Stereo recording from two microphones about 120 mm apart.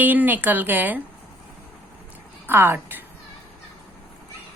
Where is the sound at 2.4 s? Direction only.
20° right (ahead or behind).